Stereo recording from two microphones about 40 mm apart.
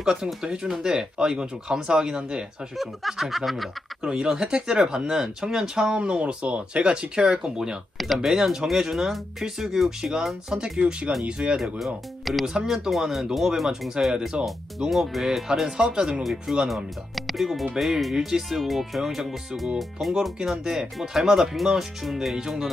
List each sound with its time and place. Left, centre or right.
0.0 s speech: centre
2.8 s speech: centre
4.0 s speech: centre
8.0 s speech: centre
10.5 s speech: right
11.8 s speech: centre
15.9 s speech: right
16.2 s speech: centre